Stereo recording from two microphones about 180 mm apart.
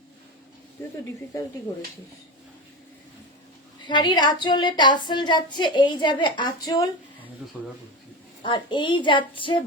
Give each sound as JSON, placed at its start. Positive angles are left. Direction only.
{"t": 3.8, "sound": "a woman's voice", "side_deg": 25}
{"t": 8.4, "sound": "a woman's voice", "side_deg": 25}